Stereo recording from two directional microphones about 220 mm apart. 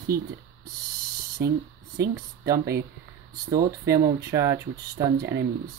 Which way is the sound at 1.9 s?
45° right (ahead or behind).